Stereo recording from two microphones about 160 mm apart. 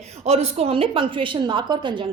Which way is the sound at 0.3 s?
40° right (ahead or behind).